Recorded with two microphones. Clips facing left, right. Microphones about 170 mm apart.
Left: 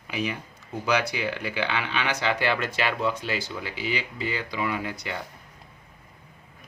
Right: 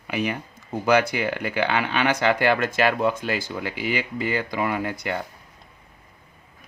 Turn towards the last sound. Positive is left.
turn(degrees=-50)  # may be behind; listen again after turning